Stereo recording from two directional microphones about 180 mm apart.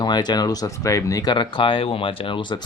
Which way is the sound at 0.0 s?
25° left (ahead or behind).